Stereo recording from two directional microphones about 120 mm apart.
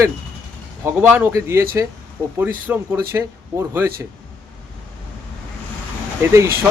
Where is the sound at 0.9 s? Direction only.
15° right (ahead or behind).